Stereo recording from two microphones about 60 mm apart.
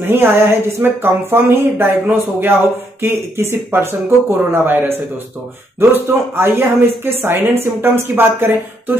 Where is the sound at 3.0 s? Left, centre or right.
Right.